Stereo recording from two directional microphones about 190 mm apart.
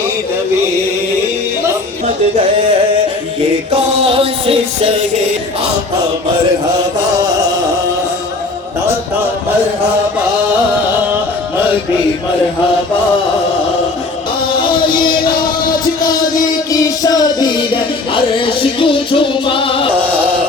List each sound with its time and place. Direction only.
3.7 s music: 30° right (ahead or behind)
14.6 s music: 25° left (ahead or behind)
16.7 s music: 20° left (ahead or behind)
20.0 s music: 10° right (ahead or behind)